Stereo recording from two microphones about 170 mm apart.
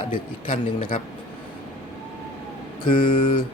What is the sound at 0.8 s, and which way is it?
Speech, 50° left (ahead or behind).